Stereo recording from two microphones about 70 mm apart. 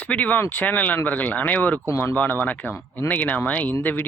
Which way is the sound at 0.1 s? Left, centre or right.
Left.